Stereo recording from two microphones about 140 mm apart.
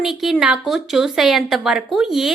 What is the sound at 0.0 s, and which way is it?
A woman's voice, centre (ahead or behind).